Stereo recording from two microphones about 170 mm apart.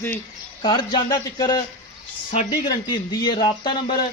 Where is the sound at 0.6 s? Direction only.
25° left (ahead or behind).